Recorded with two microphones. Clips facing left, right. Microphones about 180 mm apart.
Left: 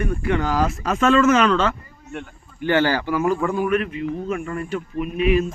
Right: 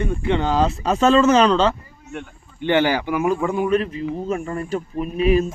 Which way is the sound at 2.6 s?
15° right (ahead or behind).